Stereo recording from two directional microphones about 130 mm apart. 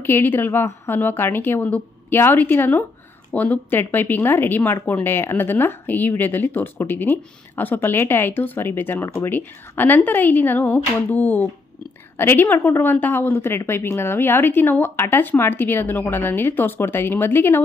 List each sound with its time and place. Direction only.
0.0 s speech: 15° left (ahead or behind)